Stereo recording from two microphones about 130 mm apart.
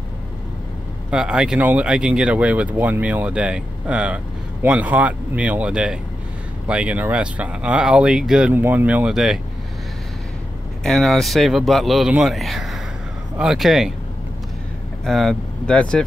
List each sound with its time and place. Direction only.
1.1 s speech: 5° right (ahead or behind)
10.8 s speech: centre (ahead or behind)
15.0 s speech: centre (ahead or behind)